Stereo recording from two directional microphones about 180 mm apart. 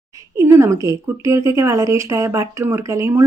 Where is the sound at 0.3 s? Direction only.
15° right (ahead or behind).